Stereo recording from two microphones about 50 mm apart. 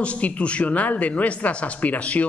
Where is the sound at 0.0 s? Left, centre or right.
Left.